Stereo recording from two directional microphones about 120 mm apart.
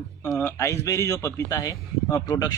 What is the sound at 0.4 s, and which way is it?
A man's voice, 25° left (ahead or behind).